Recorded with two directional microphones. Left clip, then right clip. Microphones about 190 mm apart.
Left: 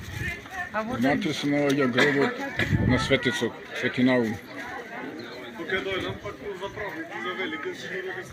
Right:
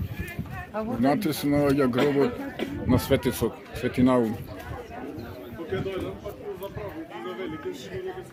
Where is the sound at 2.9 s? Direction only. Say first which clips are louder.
Right 1 dB; 15° right (ahead or behind).